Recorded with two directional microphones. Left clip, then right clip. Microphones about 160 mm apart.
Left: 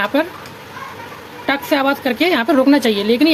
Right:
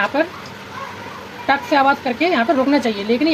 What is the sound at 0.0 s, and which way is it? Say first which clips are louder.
Speech: left 1 dB; 60° left (ahead or behind).